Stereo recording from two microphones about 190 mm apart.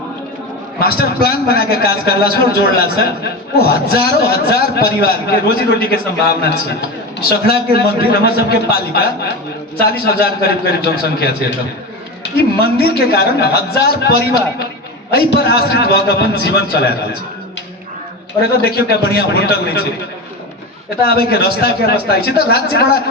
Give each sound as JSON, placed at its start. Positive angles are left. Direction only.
{"t": 0.8, "sound": "a man's voice", "side_deg": 50}
{"t": 7.4, "sound": "a man's voice", "side_deg": 55}
{"t": 18.5, "sound": "a man's voice", "side_deg": 55}
{"t": 21.0, "sound": "a man's voice", "side_deg": 55}